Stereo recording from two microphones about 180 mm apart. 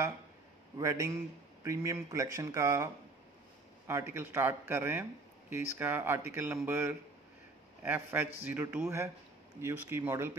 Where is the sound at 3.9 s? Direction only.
15° right (ahead or behind).